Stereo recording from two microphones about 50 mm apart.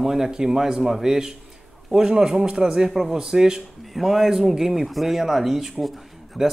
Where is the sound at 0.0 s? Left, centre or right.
Centre.